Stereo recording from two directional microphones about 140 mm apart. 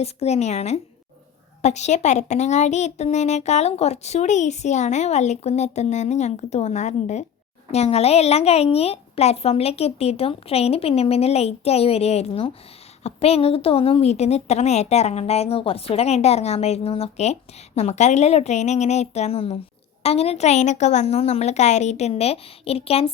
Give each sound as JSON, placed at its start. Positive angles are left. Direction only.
{"t": 0.0, "sound": "a woman's voice", "side_deg": 50}